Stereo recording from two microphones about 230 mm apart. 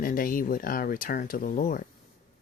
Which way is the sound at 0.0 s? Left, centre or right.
Left.